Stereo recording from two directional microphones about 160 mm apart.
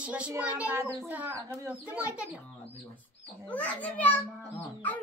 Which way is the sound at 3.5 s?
10° left (ahead or behind).